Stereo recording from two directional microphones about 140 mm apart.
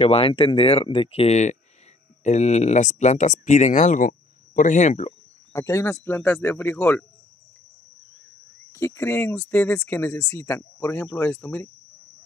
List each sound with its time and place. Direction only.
0.0 s speech: 40° left (ahead or behind)
5.5 s speech: 20° left (ahead or behind)
8.7 s speech: 20° left (ahead or behind)